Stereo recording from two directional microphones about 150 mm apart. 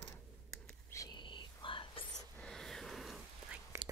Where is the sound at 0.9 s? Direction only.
25° left (ahead or behind).